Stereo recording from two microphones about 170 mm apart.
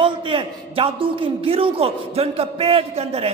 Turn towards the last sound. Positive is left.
turn(degrees=-35)  # may be behind; listen again after turning